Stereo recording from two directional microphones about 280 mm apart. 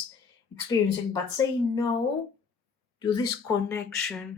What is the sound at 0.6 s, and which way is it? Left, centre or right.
Speech, centre.